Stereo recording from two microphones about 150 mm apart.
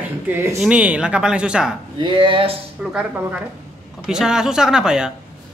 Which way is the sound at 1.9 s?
30° right (ahead or behind).